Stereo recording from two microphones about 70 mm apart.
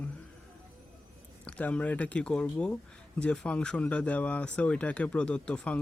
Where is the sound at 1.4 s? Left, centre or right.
Centre.